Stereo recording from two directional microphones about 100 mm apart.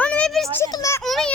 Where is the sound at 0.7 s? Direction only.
35° left (ahead or behind).